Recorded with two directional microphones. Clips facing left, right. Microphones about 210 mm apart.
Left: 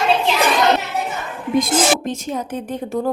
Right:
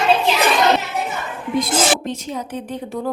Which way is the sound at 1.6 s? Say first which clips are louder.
Left 2 dB; 50° left (ahead or behind).